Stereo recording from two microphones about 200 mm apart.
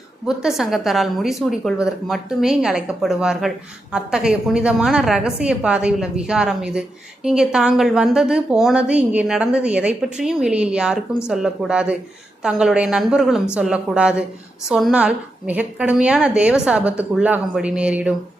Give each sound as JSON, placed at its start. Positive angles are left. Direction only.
{"t": 0.3, "sound": "a woman's voice", "side_deg": 0}